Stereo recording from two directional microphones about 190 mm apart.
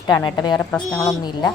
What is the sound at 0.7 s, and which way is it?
Speech, 5° left (ahead or behind).